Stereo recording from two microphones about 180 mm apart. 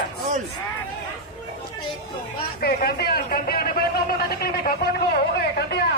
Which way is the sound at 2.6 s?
60° left (ahead or behind).